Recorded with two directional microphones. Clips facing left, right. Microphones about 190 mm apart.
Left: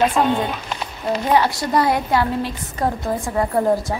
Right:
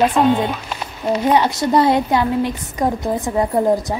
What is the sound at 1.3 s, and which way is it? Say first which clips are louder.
A woman's voice: right 1 dB; 20° right (ahead or behind).